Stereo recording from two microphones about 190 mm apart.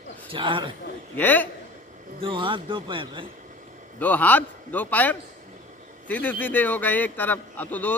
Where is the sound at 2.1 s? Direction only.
25° right (ahead or behind).